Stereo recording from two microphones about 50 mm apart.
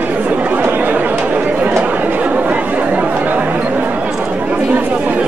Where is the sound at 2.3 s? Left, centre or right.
Right.